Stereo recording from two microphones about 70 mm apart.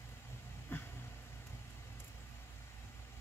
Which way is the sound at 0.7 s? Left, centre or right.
Left.